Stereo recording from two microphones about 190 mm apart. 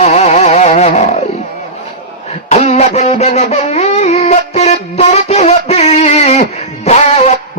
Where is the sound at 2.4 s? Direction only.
35° left (ahead or behind).